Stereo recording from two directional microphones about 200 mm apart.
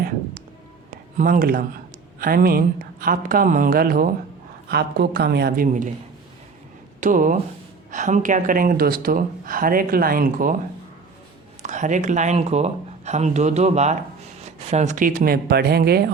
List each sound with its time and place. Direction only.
1.1 s a woman's voice: 45° right (ahead or behind)
7.0 s speech: 40° right (ahead or behind)
11.6 s speech: 40° right (ahead or behind)